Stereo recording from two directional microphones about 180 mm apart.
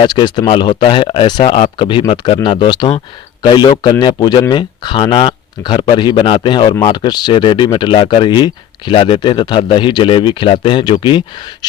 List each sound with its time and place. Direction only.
0.0 s speech: 25° left (ahead or behind)